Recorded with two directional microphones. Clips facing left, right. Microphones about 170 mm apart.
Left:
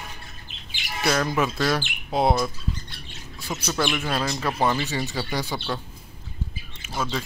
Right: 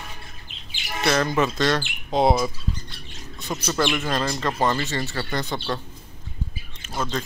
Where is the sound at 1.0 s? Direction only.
5° left (ahead or behind).